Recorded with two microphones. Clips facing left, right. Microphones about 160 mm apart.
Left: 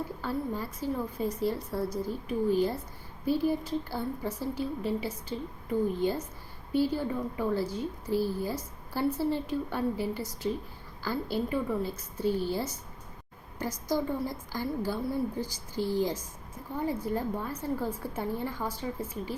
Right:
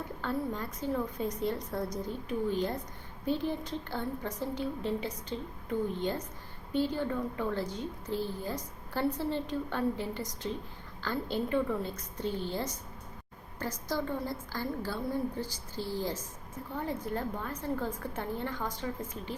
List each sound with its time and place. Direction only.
0.2 s a woman's voice: 5° left (ahead or behind)